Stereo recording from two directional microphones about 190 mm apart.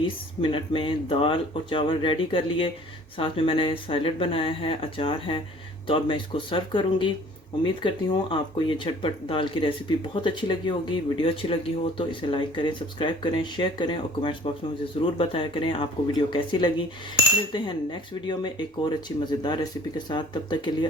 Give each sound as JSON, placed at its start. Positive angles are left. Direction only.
{"t": 0.0, "sound": "speech", "side_deg": 25}